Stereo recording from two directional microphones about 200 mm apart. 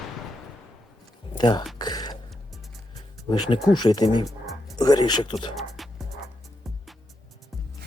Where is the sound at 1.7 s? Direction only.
20° left (ahead or behind).